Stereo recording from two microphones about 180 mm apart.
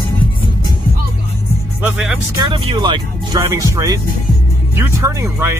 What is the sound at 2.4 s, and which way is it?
Speech, 30° right (ahead or behind).